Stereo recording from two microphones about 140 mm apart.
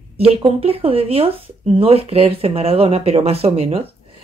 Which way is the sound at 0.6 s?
45° right (ahead or behind).